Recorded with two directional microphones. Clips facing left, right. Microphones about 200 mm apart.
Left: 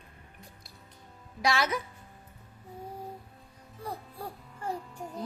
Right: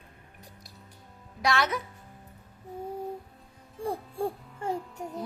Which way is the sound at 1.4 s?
Centre (ahead or behind).